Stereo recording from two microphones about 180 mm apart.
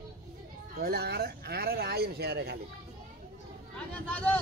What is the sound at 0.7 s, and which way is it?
Speech, 60° right (ahead or behind).